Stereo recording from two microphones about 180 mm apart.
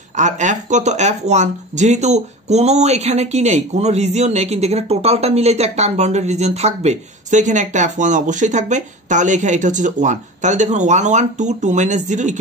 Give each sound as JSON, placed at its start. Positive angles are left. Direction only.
{"t": 0.2, "sound": "speech", "side_deg": -45}